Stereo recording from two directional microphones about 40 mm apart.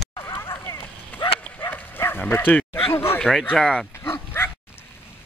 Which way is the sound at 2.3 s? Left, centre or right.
Left.